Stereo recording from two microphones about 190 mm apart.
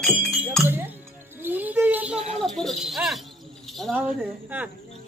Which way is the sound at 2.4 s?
Centre (ahead or behind).